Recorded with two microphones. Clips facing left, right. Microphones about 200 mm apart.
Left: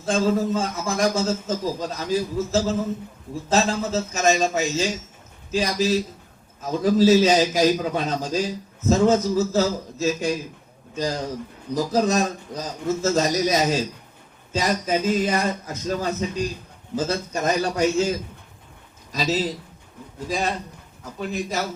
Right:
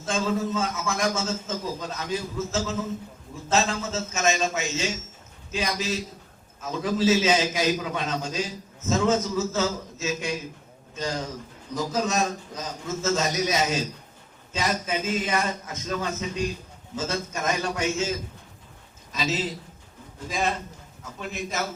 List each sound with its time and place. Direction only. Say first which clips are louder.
0.0 s a man's voice: left 5 dB; 35° left (ahead or behind)
11.7 s a man's voice: left 6 dB; 35° left (ahead or behind)